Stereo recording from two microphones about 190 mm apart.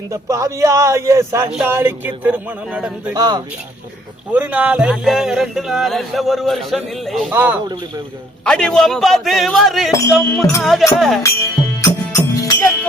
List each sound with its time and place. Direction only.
0.1 s speech: 15° right (ahead or behind)
3.2 s speech: 20° right (ahead or behind)
4.3 s speech: 5° right (ahead or behind)
8.4 s speech: 5° left (ahead or behind)
11.8 s music: 15° left (ahead or behind)